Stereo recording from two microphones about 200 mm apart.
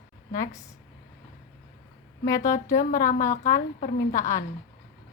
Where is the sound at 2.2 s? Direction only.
15° left (ahead or behind).